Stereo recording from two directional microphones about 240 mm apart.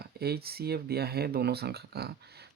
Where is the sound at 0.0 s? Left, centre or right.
Right.